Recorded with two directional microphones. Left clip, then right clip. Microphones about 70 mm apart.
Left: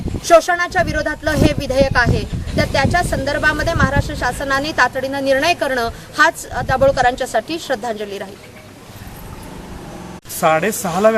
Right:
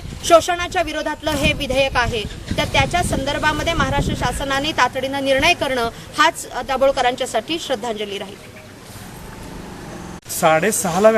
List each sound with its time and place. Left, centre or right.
0.2 s speech: centre
10.3 s speech: centre